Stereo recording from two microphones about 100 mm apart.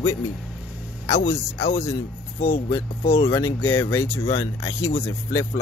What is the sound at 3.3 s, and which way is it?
Speech, 25° left (ahead or behind).